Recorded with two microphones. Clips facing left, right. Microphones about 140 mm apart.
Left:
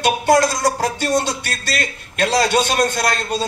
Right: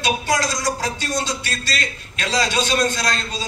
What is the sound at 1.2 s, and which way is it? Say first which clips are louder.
A man's voice: left 3 dB; 55° left (ahead or behind).